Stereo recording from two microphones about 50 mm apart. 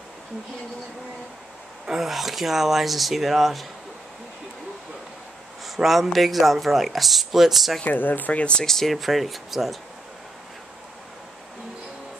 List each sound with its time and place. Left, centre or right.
1.9 s speech: centre
5.8 s speech: centre
7.8 s speech: left
8.6 s speech: centre